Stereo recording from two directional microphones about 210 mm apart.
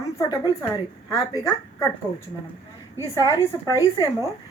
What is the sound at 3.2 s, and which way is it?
Speech, 15° left (ahead or behind).